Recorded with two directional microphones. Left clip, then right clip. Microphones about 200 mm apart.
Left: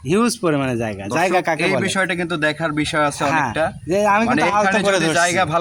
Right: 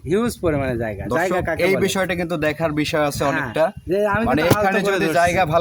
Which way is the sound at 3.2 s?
45° left (ahead or behind).